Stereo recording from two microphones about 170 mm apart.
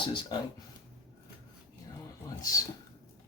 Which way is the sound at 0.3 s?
25° left (ahead or behind).